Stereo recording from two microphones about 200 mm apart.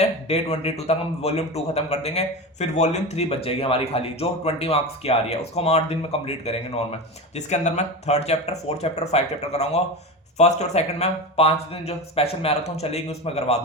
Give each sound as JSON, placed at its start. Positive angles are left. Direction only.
{"t": 0.0, "sound": "a man's voice", "side_deg": 30}